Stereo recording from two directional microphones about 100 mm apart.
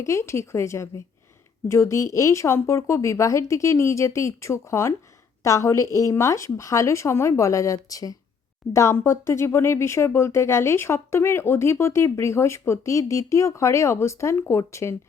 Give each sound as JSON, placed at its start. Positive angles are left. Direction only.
{"t": 0.0, "sound": "speech", "side_deg": 30}